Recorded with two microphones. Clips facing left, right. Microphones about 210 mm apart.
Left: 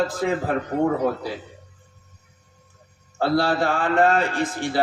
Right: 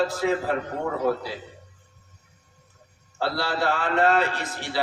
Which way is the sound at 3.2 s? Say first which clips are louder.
Left 6 dB; 50° left (ahead or behind).